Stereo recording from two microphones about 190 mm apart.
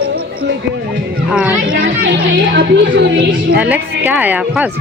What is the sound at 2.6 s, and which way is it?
Speech, 65° right (ahead or behind).